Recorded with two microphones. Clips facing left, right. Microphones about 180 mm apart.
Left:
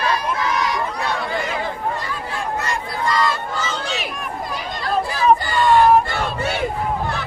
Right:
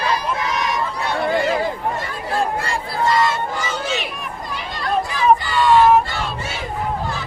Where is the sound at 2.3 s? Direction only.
30° right (ahead or behind); by 3.9 s 10° right (ahead or behind).